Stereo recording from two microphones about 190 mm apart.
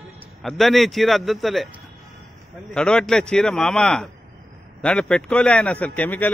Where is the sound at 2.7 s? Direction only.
5° left (ahead or behind).